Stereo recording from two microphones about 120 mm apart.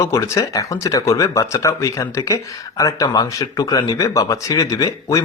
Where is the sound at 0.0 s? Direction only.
25° left (ahead or behind).